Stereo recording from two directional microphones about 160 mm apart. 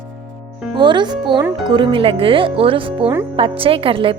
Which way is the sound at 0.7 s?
30° right (ahead or behind).